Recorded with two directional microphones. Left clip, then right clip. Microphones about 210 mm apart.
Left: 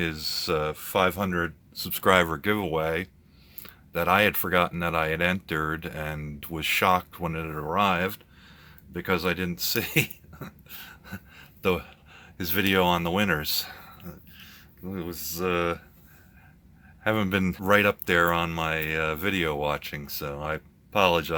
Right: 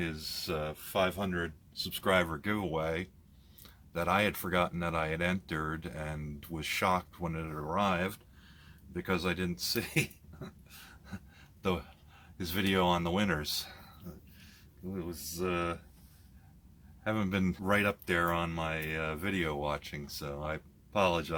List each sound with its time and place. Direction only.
0.0 s speech: 40° left (ahead or behind)
14.9 s speech: 30° left (ahead or behind)
17.0 s speech: 25° left (ahead or behind)
17.7 s speech: 35° left (ahead or behind)